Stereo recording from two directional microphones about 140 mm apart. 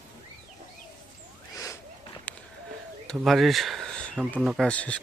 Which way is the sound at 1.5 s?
25° left (ahead or behind).